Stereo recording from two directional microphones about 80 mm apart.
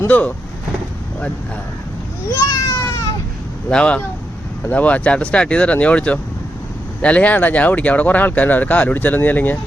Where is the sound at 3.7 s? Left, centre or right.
Centre.